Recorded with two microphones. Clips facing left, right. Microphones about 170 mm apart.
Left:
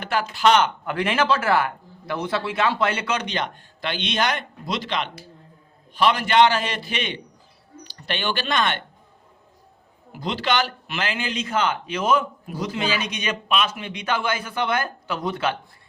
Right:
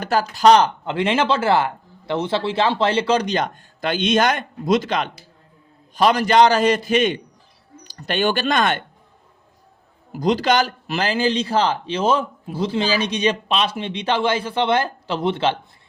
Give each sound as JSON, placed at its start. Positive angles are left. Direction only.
{"t": 0.0, "sound": "a man's voice", "side_deg": -40}
{"t": 0.9, "sound": "a man's voice", "side_deg": -25}
{"t": 10.1, "sound": "a man's voice", "side_deg": -40}